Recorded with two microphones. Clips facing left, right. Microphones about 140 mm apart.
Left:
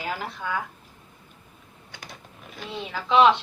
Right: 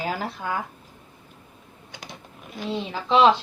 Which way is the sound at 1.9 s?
15° right (ahead or behind).